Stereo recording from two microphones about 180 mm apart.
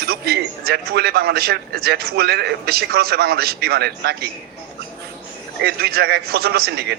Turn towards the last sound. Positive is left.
turn(degrees=-60)  # may be behind; listen again after turning